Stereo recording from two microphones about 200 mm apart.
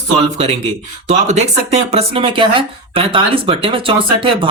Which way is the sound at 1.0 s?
35° right (ahead or behind).